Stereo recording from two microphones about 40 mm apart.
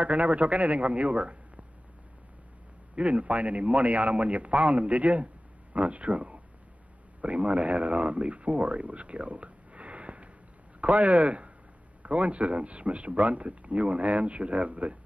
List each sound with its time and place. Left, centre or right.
0.0 s a man's voice: right
3.0 s a man's voice: right